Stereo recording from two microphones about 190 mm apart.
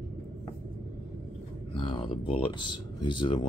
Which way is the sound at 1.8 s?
25° left (ahead or behind).